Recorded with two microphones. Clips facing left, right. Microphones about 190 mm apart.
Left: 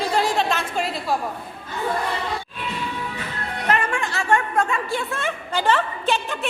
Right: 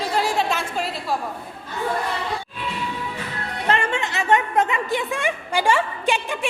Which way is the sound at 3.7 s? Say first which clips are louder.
Right 1 dB; 25° right (ahead or behind).